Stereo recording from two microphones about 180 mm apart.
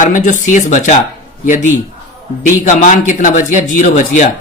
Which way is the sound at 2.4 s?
45° left (ahead or behind).